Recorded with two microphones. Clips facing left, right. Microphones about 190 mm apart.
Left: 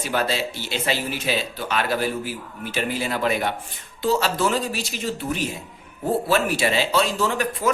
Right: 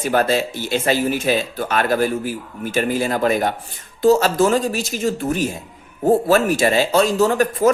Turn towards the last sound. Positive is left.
turn(degrees=-45)  # may be behind; listen again after turning